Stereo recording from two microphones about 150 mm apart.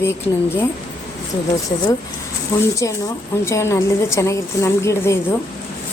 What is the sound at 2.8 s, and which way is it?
A woman's voice, 20° left (ahead or behind).